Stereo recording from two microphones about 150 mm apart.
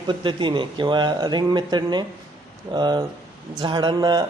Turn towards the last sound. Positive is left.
turn(degrees=-30)  # may be behind; listen again after turning